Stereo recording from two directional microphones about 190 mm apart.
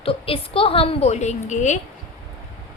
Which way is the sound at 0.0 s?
30° left (ahead or behind).